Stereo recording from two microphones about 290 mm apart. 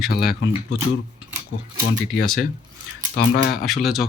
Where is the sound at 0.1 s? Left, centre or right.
Left.